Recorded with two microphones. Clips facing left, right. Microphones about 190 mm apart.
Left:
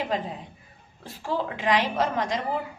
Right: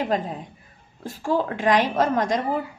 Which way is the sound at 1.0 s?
45° right (ahead or behind).